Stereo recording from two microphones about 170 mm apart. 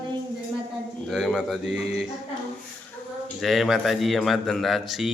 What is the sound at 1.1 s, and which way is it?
Speech, centre (ahead or behind).